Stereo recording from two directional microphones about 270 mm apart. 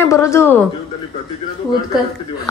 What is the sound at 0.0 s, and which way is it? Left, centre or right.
Speech, centre.